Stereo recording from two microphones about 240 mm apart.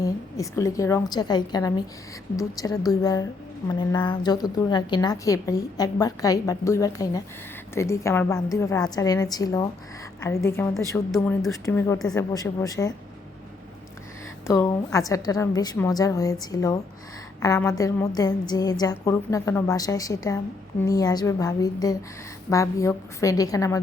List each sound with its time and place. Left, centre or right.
0.0 s a woman's voice: centre
11.1 s speech: centre
11.5 s a woman's voice: centre
14.4 s a woman's voice: centre